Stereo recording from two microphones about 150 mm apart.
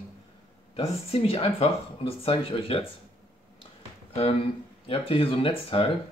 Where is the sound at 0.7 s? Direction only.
40° left (ahead or behind).